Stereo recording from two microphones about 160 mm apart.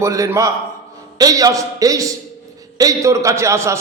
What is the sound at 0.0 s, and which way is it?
A man's voice, 20° right (ahead or behind).